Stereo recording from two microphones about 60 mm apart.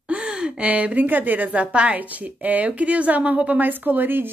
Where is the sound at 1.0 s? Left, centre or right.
Right.